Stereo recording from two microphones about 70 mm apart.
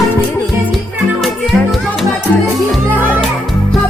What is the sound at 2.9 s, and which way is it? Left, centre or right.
Speech, right.